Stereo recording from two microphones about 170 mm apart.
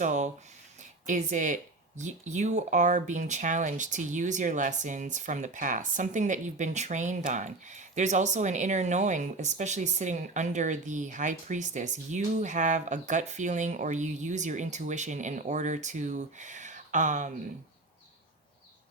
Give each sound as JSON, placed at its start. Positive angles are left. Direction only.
{"t": 0.0, "sound": "speech", "side_deg": -45}
{"t": 0.8, "sound": "a sound", "side_deg": -45}
{"t": 2.0, "sound": "speech", "side_deg": -45}